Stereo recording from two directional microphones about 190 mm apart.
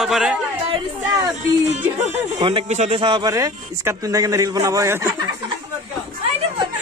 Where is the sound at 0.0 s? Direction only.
Centre (ahead or behind).